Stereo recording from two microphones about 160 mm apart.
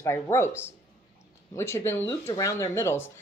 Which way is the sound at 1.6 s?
15° left (ahead or behind).